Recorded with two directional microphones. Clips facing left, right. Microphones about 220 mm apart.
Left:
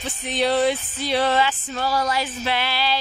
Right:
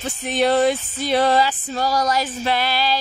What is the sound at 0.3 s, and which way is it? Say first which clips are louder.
Music: right 3 dB; 50° right (ahead or behind).